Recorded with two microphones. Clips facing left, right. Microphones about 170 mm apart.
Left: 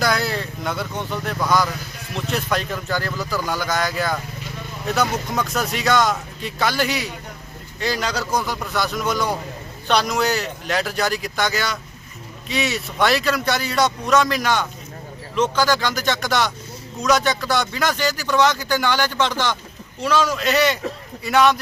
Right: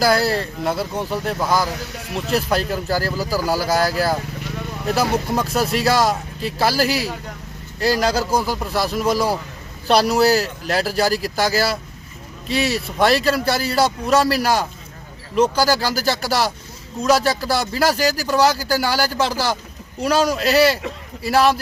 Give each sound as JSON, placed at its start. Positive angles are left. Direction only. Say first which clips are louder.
{"t": 0.0, "sound": "speech", "louder": "right 4 dB", "side_deg": -35}
{"t": 6.8, "sound": "a man's voice", "louder": "right 4 dB", "side_deg": -5}
{"t": 7.8, "sound": "speech", "louder": "right 6 dB", "side_deg": -35}
{"t": 13.0, "sound": "speech", "louder": "right 3 dB", "side_deg": -30}